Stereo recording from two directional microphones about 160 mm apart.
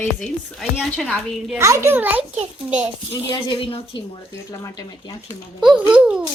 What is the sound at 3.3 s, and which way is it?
A woman's voice, 30° left (ahead or behind).